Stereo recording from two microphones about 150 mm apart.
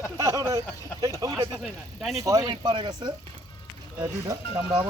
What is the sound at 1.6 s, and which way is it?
Speech, centre (ahead or behind).